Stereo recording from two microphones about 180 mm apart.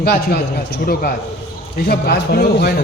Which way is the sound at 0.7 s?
60° left (ahead or behind).